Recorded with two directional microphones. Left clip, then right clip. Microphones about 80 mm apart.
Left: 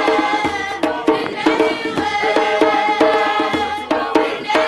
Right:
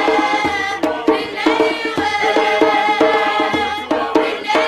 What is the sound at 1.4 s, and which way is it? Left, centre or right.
Music, centre.